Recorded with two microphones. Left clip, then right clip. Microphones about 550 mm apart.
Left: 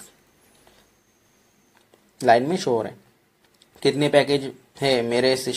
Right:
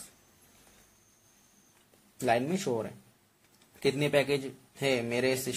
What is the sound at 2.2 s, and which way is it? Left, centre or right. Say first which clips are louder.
Speech: left 11 dB; right.